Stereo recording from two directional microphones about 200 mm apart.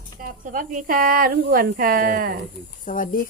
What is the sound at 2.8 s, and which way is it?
Speech, 40° left (ahead or behind).